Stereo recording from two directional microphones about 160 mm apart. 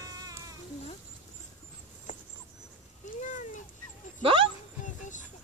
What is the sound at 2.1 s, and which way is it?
Mouse, 50° left (ahead or behind).